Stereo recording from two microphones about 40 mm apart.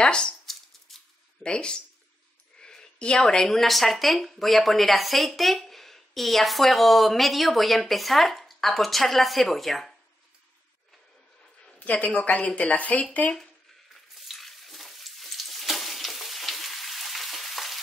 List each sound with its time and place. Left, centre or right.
0.0 s speech: left
0.5 s a sound: centre
1.4 s speech: left; by 9.9 s centre
11.8 s speech: left
14.1 s frying: centre